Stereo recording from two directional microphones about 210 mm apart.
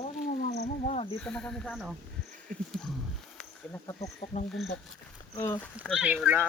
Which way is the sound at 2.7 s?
Centre (ahead or behind).